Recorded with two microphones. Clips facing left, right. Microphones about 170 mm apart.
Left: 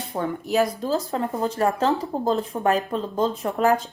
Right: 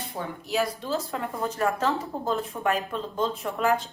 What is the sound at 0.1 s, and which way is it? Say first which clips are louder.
Speech: left 7 dB; 50° left (ahead or behind).